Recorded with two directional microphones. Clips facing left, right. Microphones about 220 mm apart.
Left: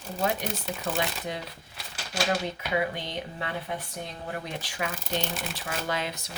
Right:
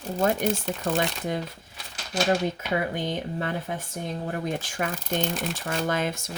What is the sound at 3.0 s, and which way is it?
Speech, 45° right (ahead or behind).